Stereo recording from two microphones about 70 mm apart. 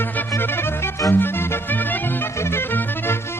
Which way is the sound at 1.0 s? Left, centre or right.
Left.